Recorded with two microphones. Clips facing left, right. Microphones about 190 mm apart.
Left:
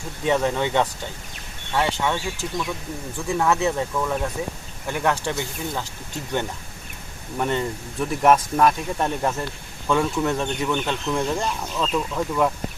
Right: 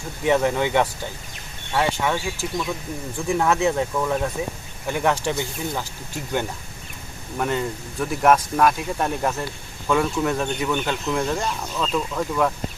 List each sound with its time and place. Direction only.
0.3 s speech: 15° right (ahead or behind)
7.3 s speech: centre (ahead or behind)